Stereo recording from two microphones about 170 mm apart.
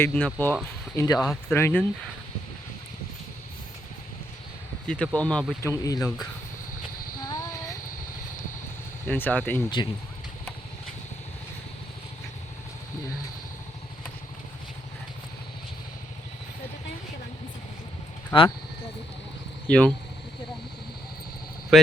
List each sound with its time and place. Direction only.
0.0 s speech: 10° left (ahead or behind)
0.9 s speech: 20° left (ahead or behind)
1.3 s speech: 10° left (ahead or behind)
4.9 s speech: 5° left (ahead or behind)
5.6 s speech: 20° left (ahead or behind)
7.3 s a sound: 20° left (ahead or behind)
9.0 s speech: 10° left (ahead or behind)
9.6 s speech: 25° left (ahead or behind)
18.3 s speech: 10° left (ahead or behind)
19.6 s speech: 5° left (ahead or behind)
21.7 s speech: centre (ahead or behind)